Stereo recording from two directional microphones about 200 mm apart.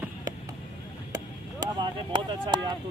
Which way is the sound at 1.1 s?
20° right (ahead or behind).